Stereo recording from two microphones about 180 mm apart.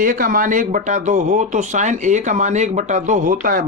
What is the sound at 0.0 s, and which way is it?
Speech, 50° right (ahead or behind).